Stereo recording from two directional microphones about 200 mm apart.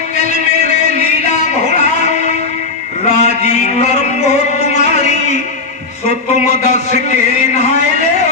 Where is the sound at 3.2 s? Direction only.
35° left (ahead or behind).